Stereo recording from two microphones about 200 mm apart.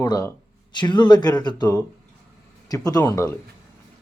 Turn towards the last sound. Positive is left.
turn(degrees=15)  # may be behind; listen again after turning